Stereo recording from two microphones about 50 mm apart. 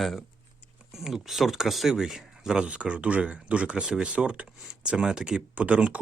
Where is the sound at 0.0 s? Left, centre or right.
Centre.